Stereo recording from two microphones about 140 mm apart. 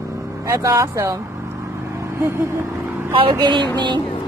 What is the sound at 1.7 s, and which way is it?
Vehicle, 20° right (ahead or behind).